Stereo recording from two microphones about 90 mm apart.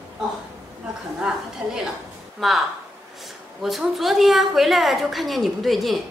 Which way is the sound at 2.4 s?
Centre (ahead or behind).